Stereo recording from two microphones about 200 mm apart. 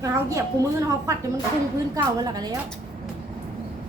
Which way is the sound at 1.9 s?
20° right (ahead or behind).